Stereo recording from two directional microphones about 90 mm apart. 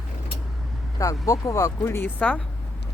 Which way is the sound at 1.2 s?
40° left (ahead or behind).